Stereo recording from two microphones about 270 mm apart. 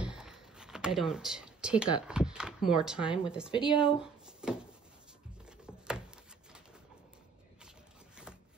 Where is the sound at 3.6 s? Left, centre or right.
Centre.